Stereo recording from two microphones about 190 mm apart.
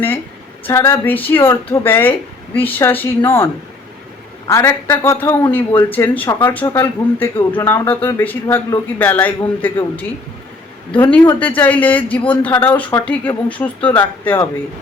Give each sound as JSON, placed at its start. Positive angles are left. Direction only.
{"t": 0.6, "sound": "speech", "side_deg": 15}
{"t": 11.3, "sound": "speech", "side_deg": 10}